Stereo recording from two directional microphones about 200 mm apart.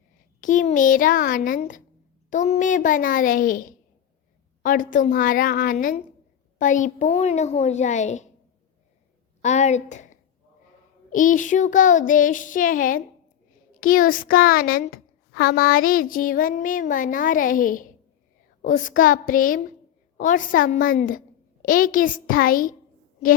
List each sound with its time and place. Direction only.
0.4 s child singing: 40° left (ahead or behind)
4.6 s a woman's voice: 40° left (ahead or behind)
6.6 s child singing: 40° left (ahead or behind)
9.4 s a woman's voice: 35° left (ahead or behind)
11.1 s child singing: 40° left (ahead or behind)
13.7 s a woman's voice: 45° left (ahead or behind)